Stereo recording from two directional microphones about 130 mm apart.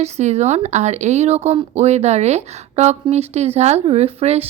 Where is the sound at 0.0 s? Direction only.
60° right (ahead or behind).